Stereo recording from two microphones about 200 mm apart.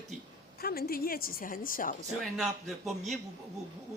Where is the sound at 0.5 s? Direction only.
50° left (ahead or behind).